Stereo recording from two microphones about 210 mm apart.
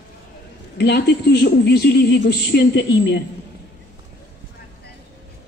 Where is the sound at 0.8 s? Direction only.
50° left (ahead or behind).